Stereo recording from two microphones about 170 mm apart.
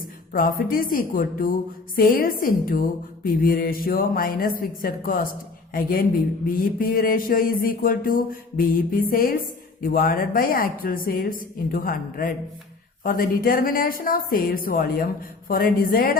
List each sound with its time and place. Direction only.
0.3 s speech: 55° left (ahead or behind)